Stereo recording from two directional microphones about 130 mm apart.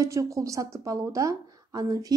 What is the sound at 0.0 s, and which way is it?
A woman's voice, 25° right (ahead or behind).